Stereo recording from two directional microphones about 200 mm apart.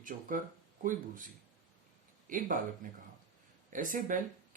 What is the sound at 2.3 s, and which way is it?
Speech, 40° right (ahead or behind).